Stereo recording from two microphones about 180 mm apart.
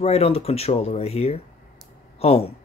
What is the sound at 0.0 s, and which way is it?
Speech, 35° left (ahead or behind).